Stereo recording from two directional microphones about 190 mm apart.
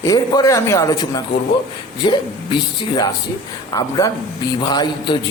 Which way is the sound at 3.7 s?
20° left (ahead or behind).